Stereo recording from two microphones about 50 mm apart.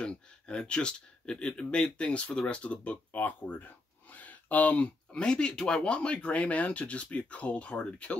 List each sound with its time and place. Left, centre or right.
0.0 s speech: centre
3.2 s a sound: left
5.2 s speech: centre